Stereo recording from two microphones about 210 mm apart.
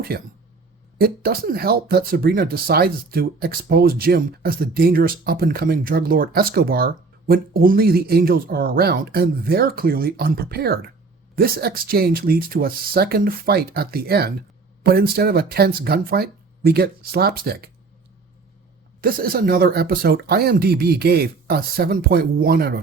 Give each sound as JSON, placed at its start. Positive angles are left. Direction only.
{"t": 0.1, "sound": "speech", "side_deg": -45}
{"t": 19.0, "sound": "speech", "side_deg": -45}